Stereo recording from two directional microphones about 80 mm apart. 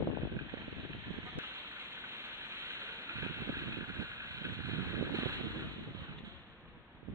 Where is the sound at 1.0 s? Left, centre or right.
Right.